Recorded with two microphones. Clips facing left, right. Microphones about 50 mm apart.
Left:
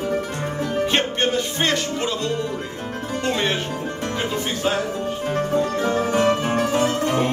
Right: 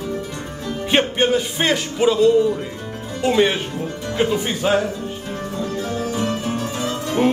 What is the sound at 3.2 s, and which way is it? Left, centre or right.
Speech, centre.